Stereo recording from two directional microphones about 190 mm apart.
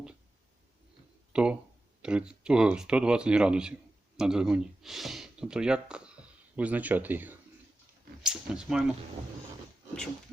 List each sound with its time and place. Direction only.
1.3 s speech: 5° right (ahead or behind)